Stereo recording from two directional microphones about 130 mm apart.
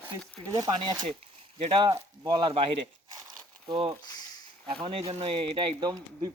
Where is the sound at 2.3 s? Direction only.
35° right (ahead or behind).